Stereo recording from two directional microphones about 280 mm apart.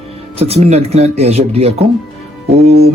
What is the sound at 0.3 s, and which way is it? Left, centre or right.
Speech, right.